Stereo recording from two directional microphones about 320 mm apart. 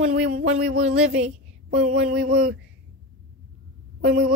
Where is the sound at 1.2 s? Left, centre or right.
Centre.